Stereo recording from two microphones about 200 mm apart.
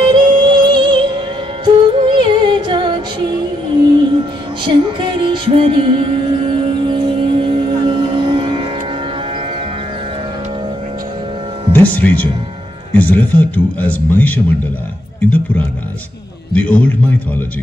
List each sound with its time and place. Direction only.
0.0 s music: 25° right (ahead or behind)
11.7 s a man's voice: 10° left (ahead or behind)